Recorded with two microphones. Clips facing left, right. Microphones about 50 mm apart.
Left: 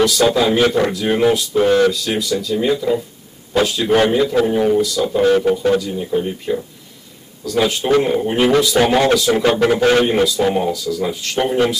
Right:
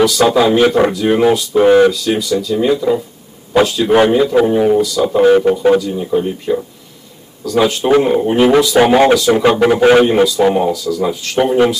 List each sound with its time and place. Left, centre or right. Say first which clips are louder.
0.0 s speech: right 3 dB; centre
1.5 s a man's voice: right 7 dB; centre
1.9 s a man's voice: right 4 dB; centre
5.8 s a man's voice: right 4 dB; centre
9.8 s a man's voice: right 5 dB; centre
10.0 s speech: right 4 dB; centre